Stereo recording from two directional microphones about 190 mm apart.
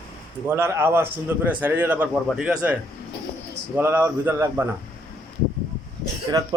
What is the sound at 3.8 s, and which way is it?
Speech, 10° right (ahead or behind).